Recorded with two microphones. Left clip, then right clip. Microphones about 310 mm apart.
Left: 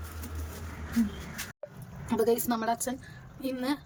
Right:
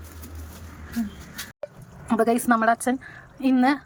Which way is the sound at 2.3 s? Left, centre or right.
Right.